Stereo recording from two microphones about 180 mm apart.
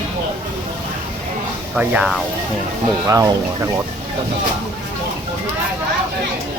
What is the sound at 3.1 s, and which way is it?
Speech, 20° right (ahead or behind).